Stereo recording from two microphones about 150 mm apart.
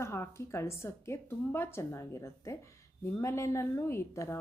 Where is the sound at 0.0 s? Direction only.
20° left (ahead or behind).